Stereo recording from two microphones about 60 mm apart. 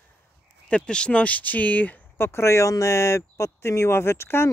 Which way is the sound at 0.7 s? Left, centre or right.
Centre.